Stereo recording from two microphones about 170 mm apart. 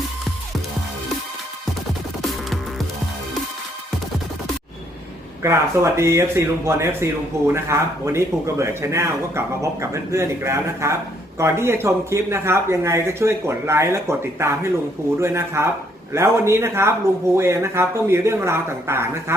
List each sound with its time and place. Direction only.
2.2 s music: centre (ahead or behind)
5.4 s speech: 15° right (ahead or behind)